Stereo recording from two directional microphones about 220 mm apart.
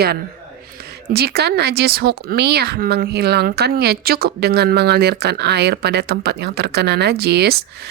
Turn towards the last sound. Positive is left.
turn(degrees=-50)  # may be behind; listen again after turning